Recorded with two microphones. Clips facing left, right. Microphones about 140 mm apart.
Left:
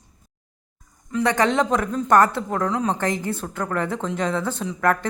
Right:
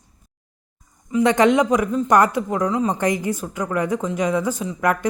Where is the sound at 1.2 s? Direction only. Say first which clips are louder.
Right 4 dB; 20° right (ahead or behind).